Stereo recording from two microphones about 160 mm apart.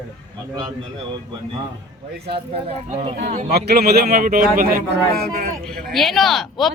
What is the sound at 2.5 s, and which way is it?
Speech, 40° right (ahead or behind).